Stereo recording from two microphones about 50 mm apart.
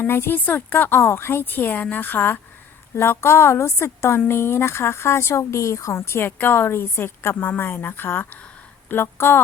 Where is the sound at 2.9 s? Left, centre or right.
Left.